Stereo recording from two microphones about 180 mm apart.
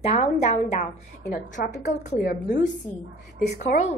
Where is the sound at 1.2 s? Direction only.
65° left (ahead or behind).